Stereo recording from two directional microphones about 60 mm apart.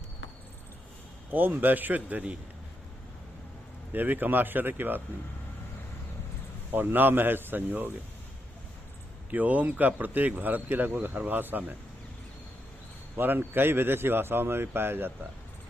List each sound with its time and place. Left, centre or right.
1.3 s a man's voice: right
3.9 s a man's voice: right
6.7 s a man's voice: right
9.3 s speech: right
13.1 s a man's voice: right